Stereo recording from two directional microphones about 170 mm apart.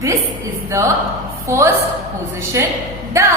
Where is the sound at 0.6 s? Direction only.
15° right (ahead or behind).